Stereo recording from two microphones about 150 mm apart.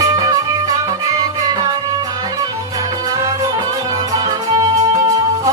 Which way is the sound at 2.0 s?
25° right (ahead or behind).